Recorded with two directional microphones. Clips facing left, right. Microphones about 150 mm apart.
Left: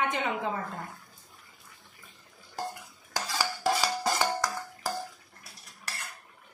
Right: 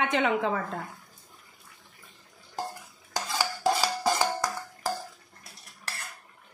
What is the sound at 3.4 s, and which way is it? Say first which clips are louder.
Music: right 2 dB; 5° right (ahead or behind).